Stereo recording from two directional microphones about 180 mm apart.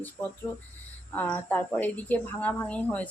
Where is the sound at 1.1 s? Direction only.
10° left (ahead or behind).